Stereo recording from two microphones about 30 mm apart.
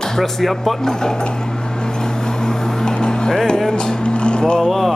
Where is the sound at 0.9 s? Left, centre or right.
Left.